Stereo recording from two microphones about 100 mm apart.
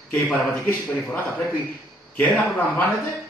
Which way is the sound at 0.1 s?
20° left (ahead or behind).